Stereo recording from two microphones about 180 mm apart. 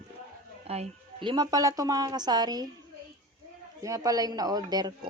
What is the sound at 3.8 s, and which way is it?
Speech, 20° right (ahead or behind).